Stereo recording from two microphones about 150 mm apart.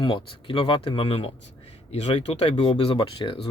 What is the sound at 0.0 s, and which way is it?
A man's voice, 35° left (ahead or behind).